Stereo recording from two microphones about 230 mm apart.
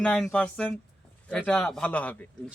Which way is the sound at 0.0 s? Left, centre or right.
Centre.